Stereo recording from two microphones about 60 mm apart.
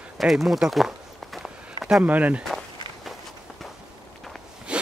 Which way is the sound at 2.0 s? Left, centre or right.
Right.